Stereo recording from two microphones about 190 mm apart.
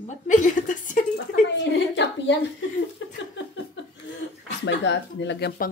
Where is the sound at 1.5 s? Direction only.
70° left (ahead or behind).